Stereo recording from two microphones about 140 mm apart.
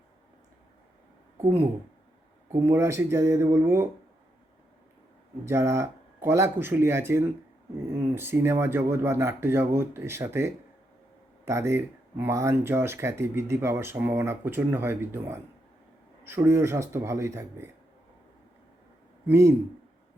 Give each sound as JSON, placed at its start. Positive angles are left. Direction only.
{"t": 2.5, "sound": "speech", "side_deg": -20}
{"t": 5.5, "sound": "speech", "side_deg": -20}
{"t": 19.3, "sound": "speech", "side_deg": -20}